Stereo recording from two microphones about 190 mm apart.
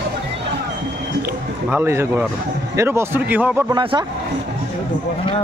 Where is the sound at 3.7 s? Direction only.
25° right (ahead or behind).